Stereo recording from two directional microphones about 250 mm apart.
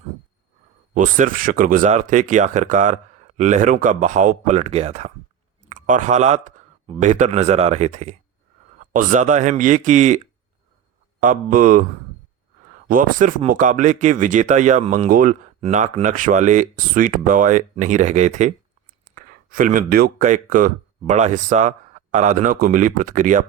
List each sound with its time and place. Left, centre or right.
0.9 s speech: right
11.2 s speech: right
12.9 s speech: right